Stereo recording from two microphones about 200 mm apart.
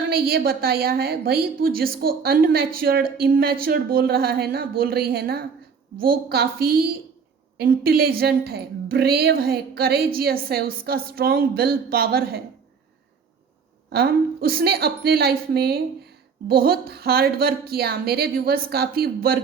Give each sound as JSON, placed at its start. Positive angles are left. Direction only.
{"t": 0.1, "sound": "a woman's voice", "side_deg": -50}
{"t": 13.9, "sound": "a woman's voice", "side_deg": -50}